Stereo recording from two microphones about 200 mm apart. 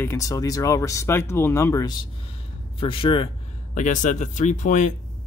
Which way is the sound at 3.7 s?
40° left (ahead or behind).